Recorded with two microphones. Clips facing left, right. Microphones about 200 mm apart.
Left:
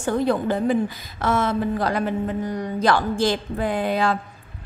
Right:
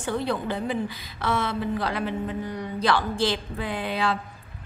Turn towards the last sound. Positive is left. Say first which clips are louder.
# left 5 dB
turn(degrees=45)  # may be behind; listen again after turning